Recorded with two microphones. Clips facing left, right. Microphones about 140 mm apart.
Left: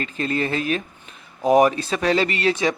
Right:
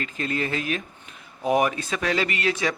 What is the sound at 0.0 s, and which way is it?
Speech, 35° left (ahead or behind).